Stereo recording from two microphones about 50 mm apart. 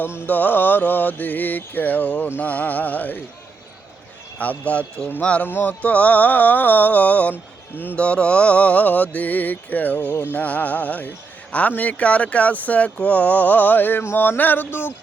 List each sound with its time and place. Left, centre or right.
0.3 s mantra: left
4.4 s speech: left
5.5 s a sound: left
5.8 s mantra: left
11.8 s speech: left
14.2 s a sound: left